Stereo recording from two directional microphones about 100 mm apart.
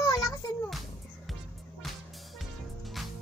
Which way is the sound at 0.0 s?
40° left (ahead or behind).